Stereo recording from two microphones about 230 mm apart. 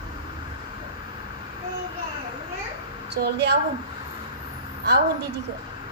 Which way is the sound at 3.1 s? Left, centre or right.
Right.